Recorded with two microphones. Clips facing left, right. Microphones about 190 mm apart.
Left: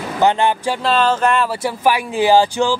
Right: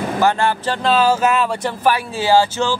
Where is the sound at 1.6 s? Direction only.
15° left (ahead or behind).